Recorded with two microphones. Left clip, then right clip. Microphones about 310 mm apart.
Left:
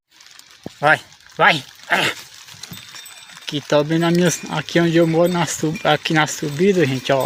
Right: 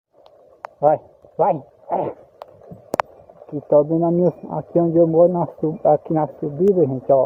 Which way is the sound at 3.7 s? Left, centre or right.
Left.